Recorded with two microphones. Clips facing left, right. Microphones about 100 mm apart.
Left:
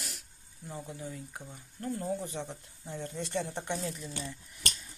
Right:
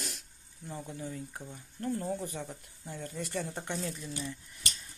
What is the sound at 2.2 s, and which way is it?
Speech, 25° left (ahead or behind).